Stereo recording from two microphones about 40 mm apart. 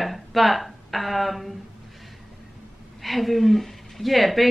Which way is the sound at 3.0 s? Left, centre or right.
Centre.